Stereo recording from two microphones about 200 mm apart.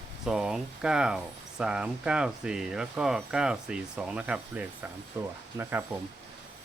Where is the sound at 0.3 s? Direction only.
Centre (ahead or behind).